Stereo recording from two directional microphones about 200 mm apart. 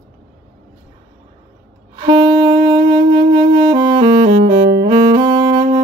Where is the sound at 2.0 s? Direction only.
25° right (ahead or behind).